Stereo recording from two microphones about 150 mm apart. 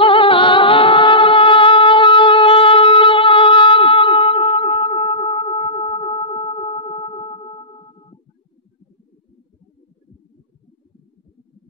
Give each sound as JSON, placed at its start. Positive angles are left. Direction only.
{"t": 0.0, "sound": "music", "side_deg": 35}